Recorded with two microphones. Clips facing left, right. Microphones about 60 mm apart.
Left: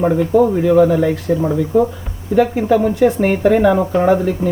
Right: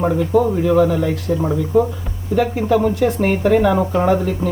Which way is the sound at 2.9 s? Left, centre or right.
Left.